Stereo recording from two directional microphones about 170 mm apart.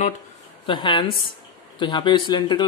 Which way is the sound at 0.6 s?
30° left (ahead or behind).